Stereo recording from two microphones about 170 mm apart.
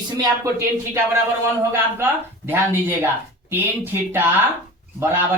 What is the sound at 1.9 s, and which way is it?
Speech, 15° right (ahead or behind).